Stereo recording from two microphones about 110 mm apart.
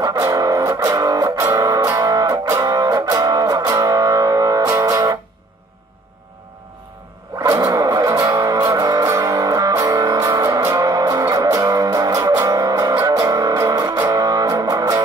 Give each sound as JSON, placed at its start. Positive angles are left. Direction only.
{"t": 0.0, "sound": "music", "side_deg": -30}
{"t": 7.5, "sound": "music", "side_deg": -30}